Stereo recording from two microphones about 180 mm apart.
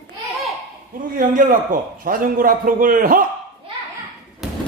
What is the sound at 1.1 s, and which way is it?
A man's voice, 50° right (ahead or behind).